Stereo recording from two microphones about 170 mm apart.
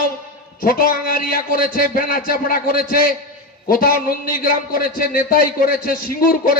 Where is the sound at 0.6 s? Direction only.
55° left (ahead or behind).